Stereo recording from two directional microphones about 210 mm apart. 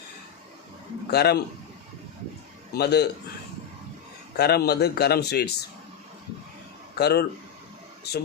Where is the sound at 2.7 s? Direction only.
50° left (ahead or behind).